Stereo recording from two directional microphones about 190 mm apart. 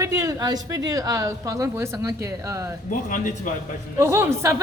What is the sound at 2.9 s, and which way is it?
Speech, 45° left (ahead or behind).